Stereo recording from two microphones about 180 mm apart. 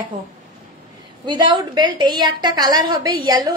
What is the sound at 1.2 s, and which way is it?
A woman's voice, 25° right (ahead or behind).